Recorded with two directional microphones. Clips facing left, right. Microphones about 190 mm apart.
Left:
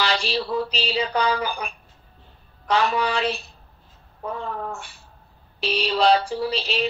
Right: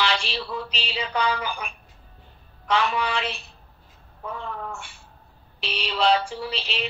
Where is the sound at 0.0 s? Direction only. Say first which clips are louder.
Left 3 dB; 40° left (ahead or behind).